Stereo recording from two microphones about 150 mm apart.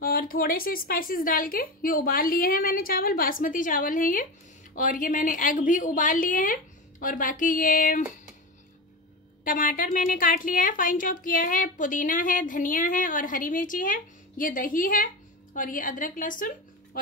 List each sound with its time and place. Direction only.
0.0 s a woman's voice: 75° left (ahead or behind)
9.4 s a woman's voice: 65° left (ahead or behind)